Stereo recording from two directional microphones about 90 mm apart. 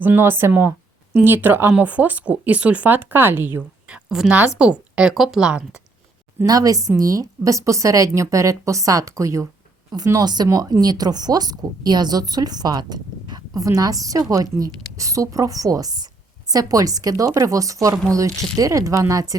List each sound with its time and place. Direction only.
0.0 s a woman's voice: 25° right (ahead or behind)
3.8 s a woman's voice: 10° right (ahead or behind)
6.4 s a woman's voice: 45° right (ahead or behind)